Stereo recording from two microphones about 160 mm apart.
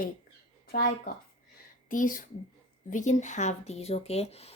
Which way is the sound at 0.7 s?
70° left (ahead or behind).